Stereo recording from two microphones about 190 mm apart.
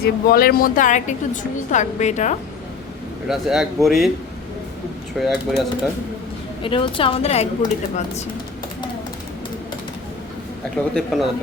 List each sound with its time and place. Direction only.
0.0 s a woman's voice: 50° left (ahead or behind)
3.2 s speech: 5° right (ahead or behind)
5.1 s speech: centre (ahead or behind)
6.6 s a woman's voice: 25° left (ahead or behind)
10.9 s speech: centre (ahead or behind)